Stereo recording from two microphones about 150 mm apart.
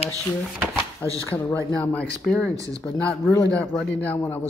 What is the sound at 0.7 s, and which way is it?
Drawer open or close, 20° right (ahead or behind).